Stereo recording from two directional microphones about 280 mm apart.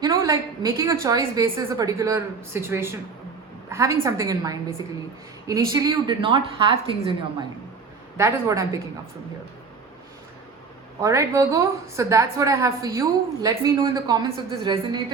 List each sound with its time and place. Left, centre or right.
0.0 s a woman's voice: centre
11.0 s a woman's voice: centre